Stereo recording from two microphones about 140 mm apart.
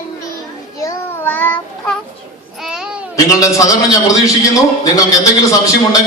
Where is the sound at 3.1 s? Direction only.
25° left (ahead or behind).